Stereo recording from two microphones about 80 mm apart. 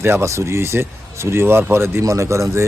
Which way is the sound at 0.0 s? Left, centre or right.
Right.